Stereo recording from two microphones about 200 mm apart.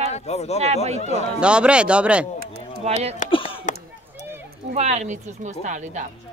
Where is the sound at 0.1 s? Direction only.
35° left (ahead or behind).